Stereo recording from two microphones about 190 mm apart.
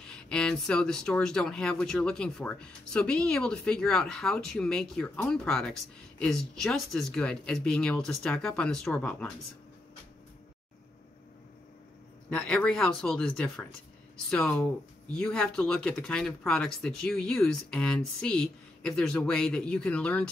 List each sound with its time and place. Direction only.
0.0 s speech: 5° left (ahead or behind)
12.3 s speech: 5° left (ahead or behind)